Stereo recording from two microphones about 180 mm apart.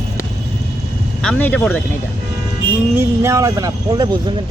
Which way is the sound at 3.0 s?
15° right (ahead or behind).